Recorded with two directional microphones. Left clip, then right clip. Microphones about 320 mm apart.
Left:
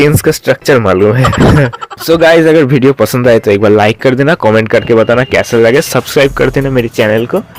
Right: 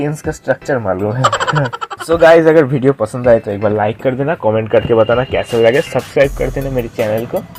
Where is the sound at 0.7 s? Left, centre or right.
Left.